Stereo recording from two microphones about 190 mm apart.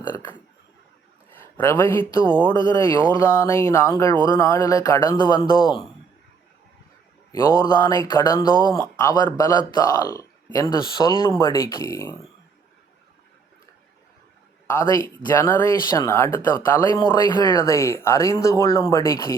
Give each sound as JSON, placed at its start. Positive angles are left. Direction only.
{"t": 1.4, "sound": "speech", "side_deg": 10}
{"t": 2.2, "sound": "speech", "side_deg": -25}
{"t": 2.5, "sound": "speech", "side_deg": 20}
{"t": 7.3, "sound": "speech", "side_deg": 15}
{"t": 14.7, "sound": "speech", "side_deg": 10}